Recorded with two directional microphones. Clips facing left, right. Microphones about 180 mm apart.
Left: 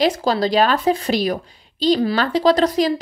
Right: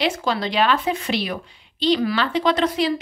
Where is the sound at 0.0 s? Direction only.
35° left (ahead or behind).